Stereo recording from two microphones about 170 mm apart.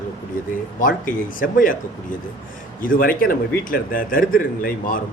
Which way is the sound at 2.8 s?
55° left (ahead or behind).